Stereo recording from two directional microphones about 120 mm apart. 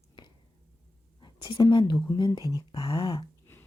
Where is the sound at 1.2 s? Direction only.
40° left (ahead or behind).